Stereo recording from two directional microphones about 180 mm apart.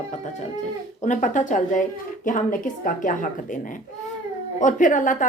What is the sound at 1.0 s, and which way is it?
Speech, 45° left (ahead or behind).